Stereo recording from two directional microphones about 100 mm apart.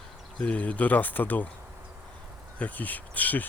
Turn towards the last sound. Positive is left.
turn(degrees=15)  # may be behind; listen again after turning